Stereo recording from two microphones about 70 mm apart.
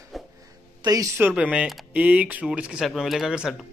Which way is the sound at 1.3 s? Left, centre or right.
Centre.